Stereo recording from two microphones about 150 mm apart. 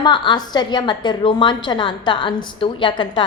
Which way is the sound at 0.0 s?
30° left (ahead or behind).